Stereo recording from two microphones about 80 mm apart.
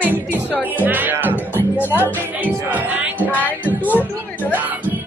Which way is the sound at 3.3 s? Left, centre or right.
Left.